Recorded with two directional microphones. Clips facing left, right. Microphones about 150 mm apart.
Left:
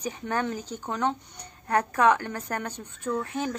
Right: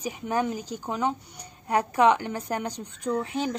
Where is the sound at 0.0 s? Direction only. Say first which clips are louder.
Right 2 dB; 10° right (ahead or behind).